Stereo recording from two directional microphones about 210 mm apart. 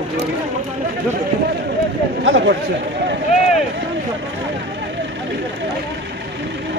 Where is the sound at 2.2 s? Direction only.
60° right (ahead or behind).